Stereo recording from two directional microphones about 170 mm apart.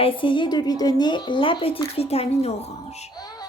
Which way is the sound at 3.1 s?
25° left (ahead or behind).